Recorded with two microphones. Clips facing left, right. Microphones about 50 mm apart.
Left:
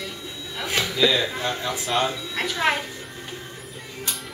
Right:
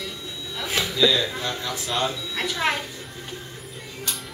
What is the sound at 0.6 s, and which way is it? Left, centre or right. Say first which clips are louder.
Speech: even; centre.